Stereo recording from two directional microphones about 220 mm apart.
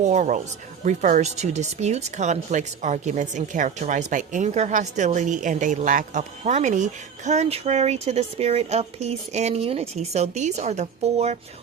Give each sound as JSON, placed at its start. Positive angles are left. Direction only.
{"t": 0.0, "sound": "speech", "side_deg": -35}